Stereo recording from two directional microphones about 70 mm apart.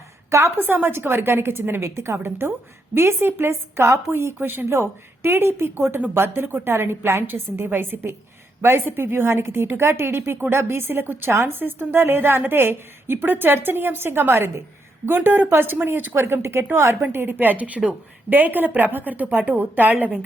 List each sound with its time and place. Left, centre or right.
0.3 s a woman's voice: right
0.5 s a woman's voice: right